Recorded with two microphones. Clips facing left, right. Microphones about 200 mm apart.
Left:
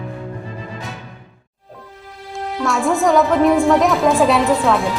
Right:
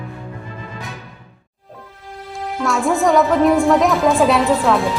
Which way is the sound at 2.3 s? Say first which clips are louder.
Even; centre (ahead or behind).